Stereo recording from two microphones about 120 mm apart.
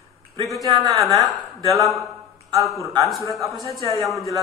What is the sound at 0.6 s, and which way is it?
Speech, 30° right (ahead or behind).